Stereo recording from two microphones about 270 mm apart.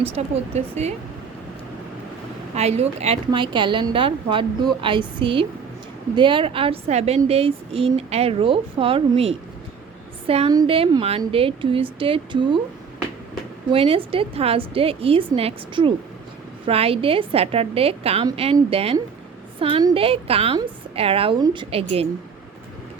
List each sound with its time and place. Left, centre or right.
0.2 s a woman's voice: right
2.6 s a woman's voice: right
13.7 s a woman's voice: right